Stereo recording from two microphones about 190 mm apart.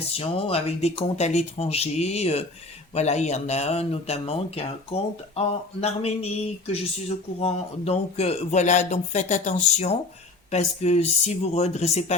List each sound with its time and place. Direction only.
0.1 s speech: 30° left (ahead or behind)